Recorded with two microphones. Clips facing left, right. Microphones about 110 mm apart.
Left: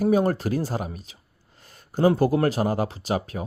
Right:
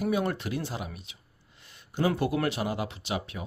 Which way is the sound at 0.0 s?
40° left (ahead or behind).